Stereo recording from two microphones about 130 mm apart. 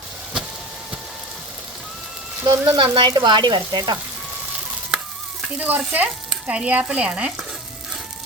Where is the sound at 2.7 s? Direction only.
40° right (ahead or behind).